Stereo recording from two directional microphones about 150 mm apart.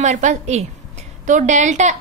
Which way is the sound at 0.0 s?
55° right (ahead or behind).